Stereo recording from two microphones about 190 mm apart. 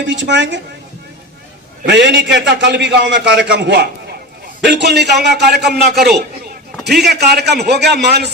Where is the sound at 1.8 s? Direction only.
70° right (ahead or behind).